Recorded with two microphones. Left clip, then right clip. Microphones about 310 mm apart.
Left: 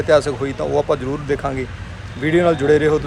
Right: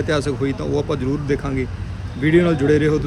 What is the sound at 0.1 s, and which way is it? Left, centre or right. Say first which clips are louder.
A man's voice: left 8 dB; centre.